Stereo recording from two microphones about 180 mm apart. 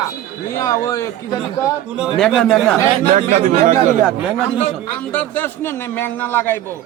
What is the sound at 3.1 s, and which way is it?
Speech, 45° right (ahead or behind).